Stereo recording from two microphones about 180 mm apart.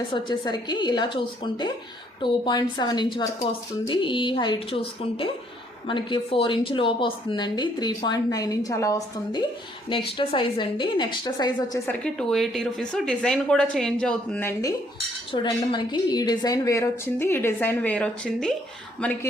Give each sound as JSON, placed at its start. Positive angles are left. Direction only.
{"t": 0.1, "sound": "a woman's voice", "side_deg": 25}
{"t": 9.9, "sound": "a woman's voice", "side_deg": 30}
{"t": 11.9, "sound": "a woman's voice", "side_deg": 5}
{"t": 15.3, "sound": "a woman's voice", "side_deg": 25}